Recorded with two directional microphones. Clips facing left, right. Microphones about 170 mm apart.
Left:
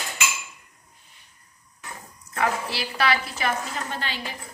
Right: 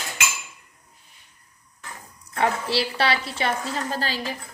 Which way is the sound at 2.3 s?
30° right (ahead or behind).